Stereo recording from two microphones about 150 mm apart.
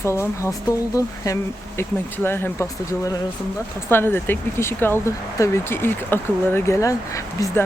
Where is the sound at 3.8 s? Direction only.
15° left (ahead or behind).